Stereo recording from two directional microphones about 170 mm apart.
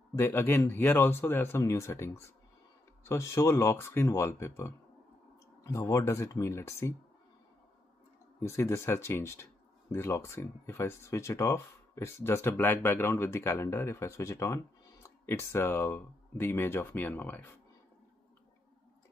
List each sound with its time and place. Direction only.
0.1 s speech: 15° left (ahead or behind)
8.4 s speech: 15° left (ahead or behind)